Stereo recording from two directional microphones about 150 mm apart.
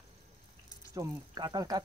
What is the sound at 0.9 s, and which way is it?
Speech, 25° right (ahead or behind).